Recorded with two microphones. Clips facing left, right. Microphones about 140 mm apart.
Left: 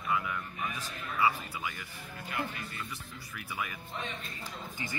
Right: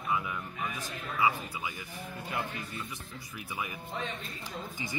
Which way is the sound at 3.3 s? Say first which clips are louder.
Even; 20° right (ahead or behind).